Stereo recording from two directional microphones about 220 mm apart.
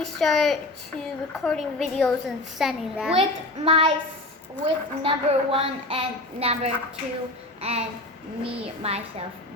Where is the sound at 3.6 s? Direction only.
25° right (ahead or behind).